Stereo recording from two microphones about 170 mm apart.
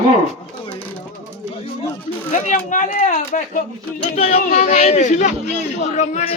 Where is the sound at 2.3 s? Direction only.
50° left (ahead or behind).